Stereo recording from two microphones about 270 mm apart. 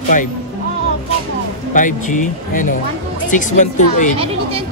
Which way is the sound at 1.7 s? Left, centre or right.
Left.